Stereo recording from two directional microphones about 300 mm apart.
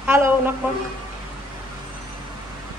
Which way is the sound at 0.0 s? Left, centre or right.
Centre.